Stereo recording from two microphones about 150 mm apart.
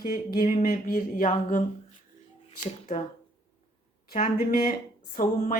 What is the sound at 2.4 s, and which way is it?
Speech, 45° left (ahead or behind).